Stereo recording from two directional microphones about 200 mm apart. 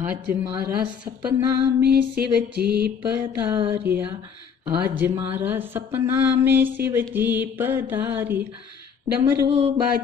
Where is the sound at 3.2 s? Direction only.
10° right (ahead or behind).